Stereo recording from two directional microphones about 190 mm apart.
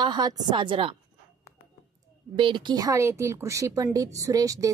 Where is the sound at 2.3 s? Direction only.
25° right (ahead or behind).